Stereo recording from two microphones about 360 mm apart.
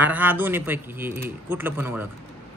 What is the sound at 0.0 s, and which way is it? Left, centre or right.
Speech, centre.